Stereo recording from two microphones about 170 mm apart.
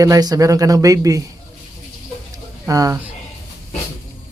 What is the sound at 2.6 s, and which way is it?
Speech, 20° right (ahead or behind).